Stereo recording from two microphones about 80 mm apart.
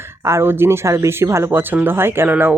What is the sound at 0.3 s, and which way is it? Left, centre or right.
Speech, right.